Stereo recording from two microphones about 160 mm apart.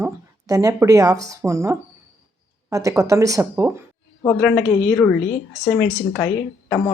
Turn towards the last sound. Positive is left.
turn(degrees=5)  # may be behind; listen again after turning